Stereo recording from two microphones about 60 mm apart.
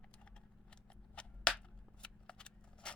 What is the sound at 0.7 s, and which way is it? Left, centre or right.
Shuffling cards, centre.